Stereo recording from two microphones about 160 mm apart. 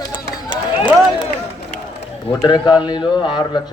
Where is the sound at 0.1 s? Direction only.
25° left (ahead or behind).